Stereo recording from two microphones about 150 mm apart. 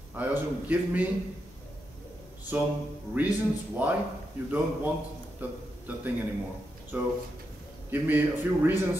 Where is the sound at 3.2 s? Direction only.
10° right (ahead or behind).